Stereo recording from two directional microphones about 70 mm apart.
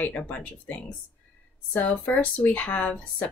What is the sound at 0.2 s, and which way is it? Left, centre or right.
Speech, centre.